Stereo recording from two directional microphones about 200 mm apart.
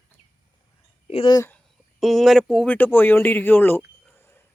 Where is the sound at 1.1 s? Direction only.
25° left (ahead or behind).